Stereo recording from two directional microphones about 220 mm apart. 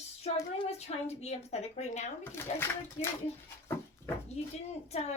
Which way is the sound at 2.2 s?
10° left (ahead or behind).